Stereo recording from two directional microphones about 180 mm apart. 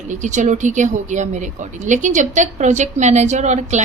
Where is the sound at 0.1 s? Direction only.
45° right (ahead or behind).